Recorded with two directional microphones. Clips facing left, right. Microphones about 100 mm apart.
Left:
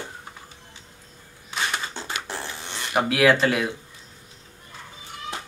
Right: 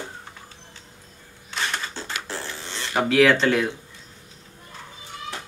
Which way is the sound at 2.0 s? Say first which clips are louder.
Even; 15° left (ahead or behind).